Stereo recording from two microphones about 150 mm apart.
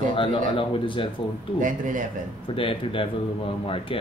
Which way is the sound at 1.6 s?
60° right (ahead or behind).